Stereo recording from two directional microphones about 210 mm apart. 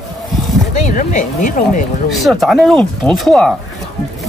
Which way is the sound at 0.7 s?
35° left (ahead or behind).